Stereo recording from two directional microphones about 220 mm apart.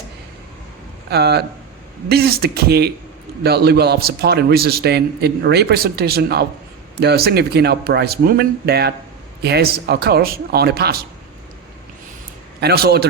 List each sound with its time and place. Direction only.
1.1 s a man's voice: 45° right (ahead or behind)
12.5 s a man's voice: 45° right (ahead or behind)